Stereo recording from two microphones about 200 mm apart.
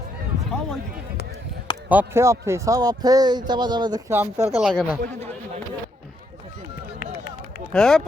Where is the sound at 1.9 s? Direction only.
10° right (ahead or behind).